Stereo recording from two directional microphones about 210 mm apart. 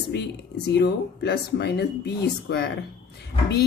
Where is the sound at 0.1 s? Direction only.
55° left (ahead or behind).